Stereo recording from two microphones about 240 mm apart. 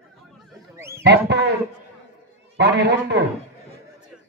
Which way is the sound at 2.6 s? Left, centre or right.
Right.